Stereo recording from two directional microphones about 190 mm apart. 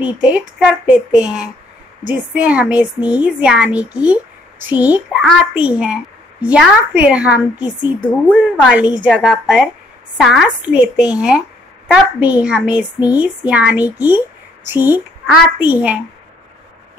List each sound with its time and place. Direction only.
0.0 s a woman's voice: 5° right (ahead or behind)